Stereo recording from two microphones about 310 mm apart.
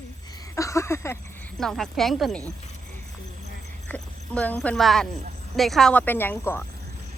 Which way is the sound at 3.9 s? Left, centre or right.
Centre.